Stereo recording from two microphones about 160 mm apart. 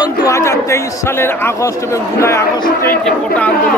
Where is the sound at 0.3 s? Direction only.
20° left (ahead or behind).